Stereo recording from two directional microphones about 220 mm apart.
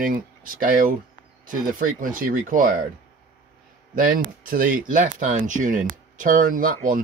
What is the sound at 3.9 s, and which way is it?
Speech, 40° right (ahead or behind).